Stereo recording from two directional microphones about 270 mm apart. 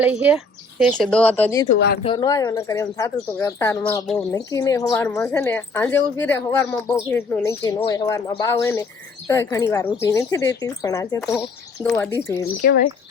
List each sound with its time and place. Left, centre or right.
0.0 s speech: centre
1.7 s speech: left
2.0 s speech: centre
12.6 s speech: left